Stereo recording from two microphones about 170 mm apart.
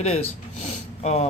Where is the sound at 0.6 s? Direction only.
40° left (ahead or behind).